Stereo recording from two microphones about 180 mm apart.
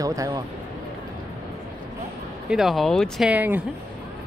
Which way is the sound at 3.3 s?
10° right (ahead or behind).